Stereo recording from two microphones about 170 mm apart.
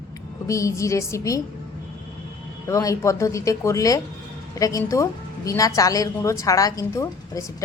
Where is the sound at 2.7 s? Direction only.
20° left (ahead or behind).